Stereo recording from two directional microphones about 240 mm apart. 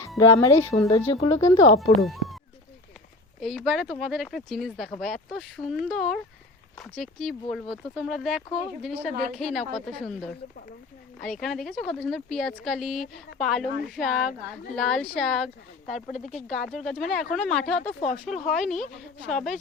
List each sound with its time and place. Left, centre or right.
0.2 s speech: centre
2.0 s a sound: centre
3.4 s speech: centre
16.1 s speech: left
16.5 s speech: centre